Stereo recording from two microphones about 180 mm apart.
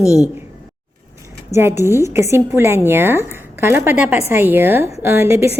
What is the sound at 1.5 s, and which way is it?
A woman's voice, 15° right (ahead or behind).